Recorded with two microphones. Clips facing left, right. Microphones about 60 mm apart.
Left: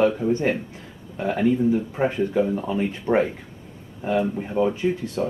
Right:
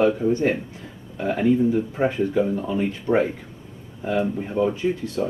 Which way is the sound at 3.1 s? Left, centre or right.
Left.